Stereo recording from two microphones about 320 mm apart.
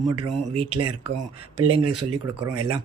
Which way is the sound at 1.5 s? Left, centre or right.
Right.